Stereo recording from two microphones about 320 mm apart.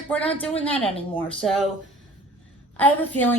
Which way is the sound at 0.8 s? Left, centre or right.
Centre.